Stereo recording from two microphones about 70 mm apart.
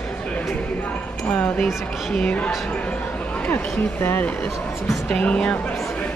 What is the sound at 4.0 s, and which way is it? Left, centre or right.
Speech, left.